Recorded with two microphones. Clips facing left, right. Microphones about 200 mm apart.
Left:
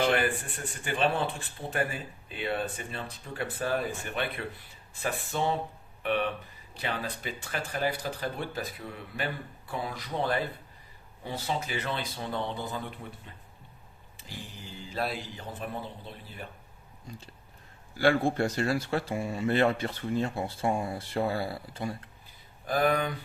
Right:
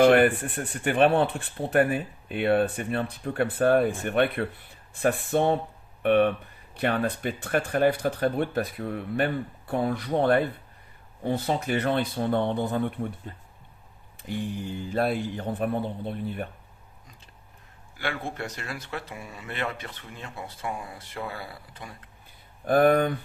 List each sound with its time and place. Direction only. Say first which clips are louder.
0.0 s speech: right 9 dB; 60° right (ahead or behind)
17.9 s speech: left 8 dB; 35° left (ahead or behind)
22.6 s speech: right 7 dB; 55° right (ahead or behind)